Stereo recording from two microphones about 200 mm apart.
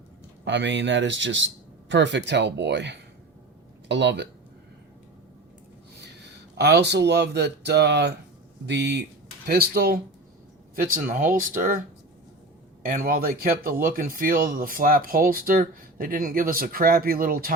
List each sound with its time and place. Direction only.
0.4 s speech: 60° right (ahead or behind)
6.6 s speech: 55° right (ahead or behind)
12.8 s speech: 45° right (ahead or behind)